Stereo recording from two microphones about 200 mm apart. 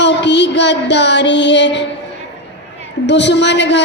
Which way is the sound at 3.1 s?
60° left (ahead or behind).